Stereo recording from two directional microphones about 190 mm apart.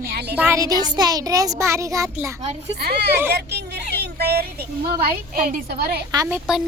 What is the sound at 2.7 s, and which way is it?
A woman's voice, 60° right (ahead or behind).